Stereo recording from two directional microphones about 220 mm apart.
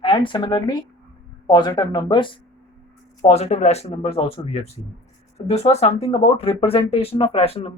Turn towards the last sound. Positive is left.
turn(degrees=25)  # may be behind; listen again after turning